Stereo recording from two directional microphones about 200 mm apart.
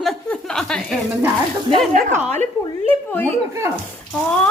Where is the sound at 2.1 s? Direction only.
35° right (ahead or behind).